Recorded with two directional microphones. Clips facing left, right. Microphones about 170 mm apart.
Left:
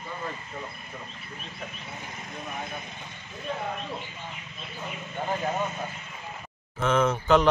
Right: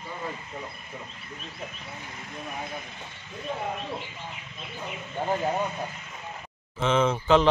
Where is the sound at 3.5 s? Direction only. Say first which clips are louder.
Even; 10° right (ahead or behind).